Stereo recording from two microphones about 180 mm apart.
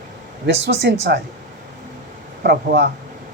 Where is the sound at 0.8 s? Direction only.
80° right.